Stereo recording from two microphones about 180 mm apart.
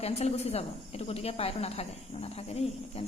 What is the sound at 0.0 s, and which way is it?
Speech, 35° left (ahead or behind).